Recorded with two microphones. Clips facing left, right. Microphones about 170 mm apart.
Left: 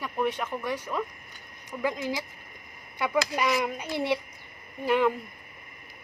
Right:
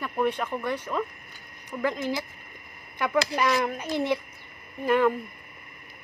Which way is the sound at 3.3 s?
15° left (ahead or behind).